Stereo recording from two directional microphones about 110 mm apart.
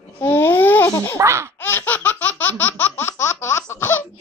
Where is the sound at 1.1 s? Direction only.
25° right (ahead or behind).